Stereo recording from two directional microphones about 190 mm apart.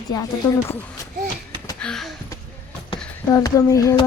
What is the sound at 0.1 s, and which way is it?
Speech, 20° left (ahead or behind).